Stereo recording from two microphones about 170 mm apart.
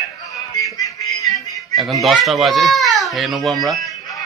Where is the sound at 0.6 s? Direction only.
20° left (ahead or behind).